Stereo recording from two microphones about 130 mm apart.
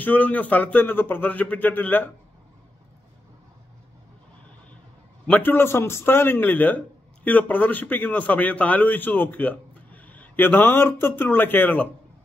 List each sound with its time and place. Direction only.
0.0 s a man's voice: 10° left (ahead or behind)
5.2 s a man's voice: 15° left (ahead or behind)